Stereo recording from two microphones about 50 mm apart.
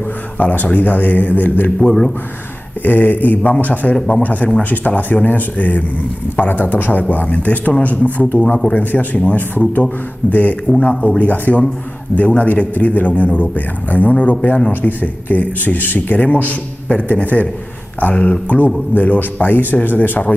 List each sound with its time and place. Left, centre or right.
0.4 s speech: left
1.8 s a man's voice: centre
2.8 s speech: left